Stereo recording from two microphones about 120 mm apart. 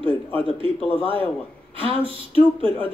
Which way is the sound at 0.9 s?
45° right (ahead or behind).